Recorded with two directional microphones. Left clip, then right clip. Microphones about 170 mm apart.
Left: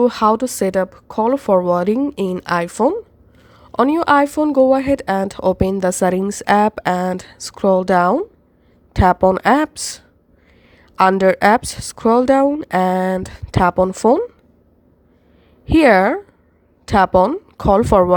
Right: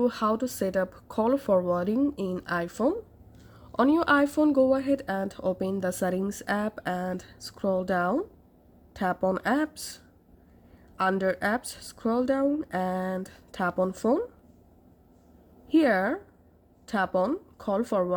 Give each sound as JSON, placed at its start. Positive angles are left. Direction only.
{"t": 0.0, "sound": "speech", "side_deg": 35}
{"t": 15.6, "sound": "speech", "side_deg": 40}